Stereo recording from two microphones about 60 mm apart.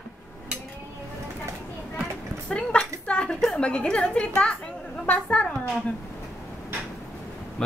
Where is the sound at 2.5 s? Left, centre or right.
Centre.